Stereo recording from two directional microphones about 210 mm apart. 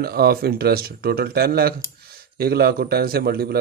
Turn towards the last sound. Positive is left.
turn(degrees=-45)  # may be behind; listen again after turning